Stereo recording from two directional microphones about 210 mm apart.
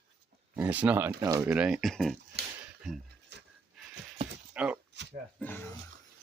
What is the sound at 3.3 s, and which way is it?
Pant, 55° right (ahead or behind).